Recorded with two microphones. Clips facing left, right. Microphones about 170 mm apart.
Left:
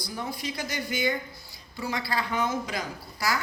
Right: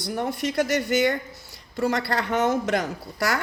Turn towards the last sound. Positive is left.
turn(degrees=-65)  # may be behind; listen again after turning